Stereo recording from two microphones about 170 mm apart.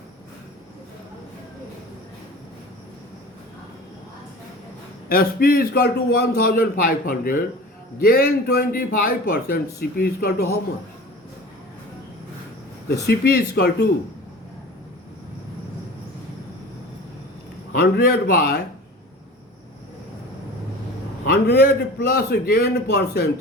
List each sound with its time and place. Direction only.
5.0 s a man's voice: 60° left (ahead or behind)
13.1 s a man's voice: 70° left (ahead or behind)
17.7 s a man's voice: 65° left (ahead or behind)
21.2 s a man's voice: 70° left (ahead or behind)